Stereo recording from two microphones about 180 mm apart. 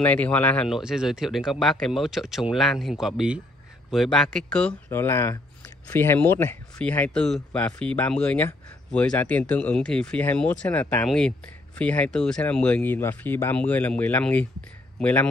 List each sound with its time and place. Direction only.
0.0 s speech: 10° left (ahead or behind)